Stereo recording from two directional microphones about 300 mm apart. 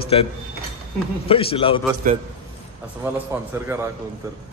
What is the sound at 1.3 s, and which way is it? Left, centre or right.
Speech, centre.